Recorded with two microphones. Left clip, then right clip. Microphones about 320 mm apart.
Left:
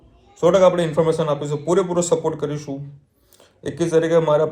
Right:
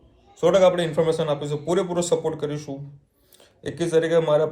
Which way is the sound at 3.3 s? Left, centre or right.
Centre.